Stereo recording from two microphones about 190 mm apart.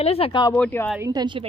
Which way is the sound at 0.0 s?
30° left (ahead or behind).